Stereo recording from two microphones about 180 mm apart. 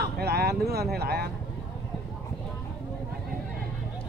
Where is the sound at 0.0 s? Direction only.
60° right (ahead or behind).